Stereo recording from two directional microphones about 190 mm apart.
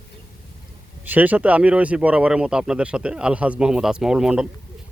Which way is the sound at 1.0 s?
10° right (ahead or behind).